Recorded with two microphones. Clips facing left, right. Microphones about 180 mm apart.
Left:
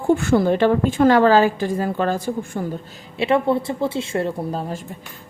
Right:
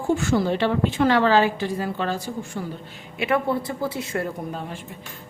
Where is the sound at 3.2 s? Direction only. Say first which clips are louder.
Left 4 dB; 25° left (ahead or behind).